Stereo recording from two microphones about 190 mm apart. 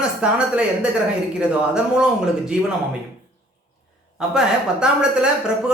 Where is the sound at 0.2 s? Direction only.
5° right (ahead or behind).